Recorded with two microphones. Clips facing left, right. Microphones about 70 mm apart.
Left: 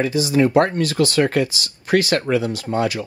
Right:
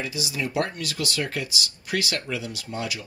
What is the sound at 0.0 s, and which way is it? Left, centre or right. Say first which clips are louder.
Speech: left 13 dB; left.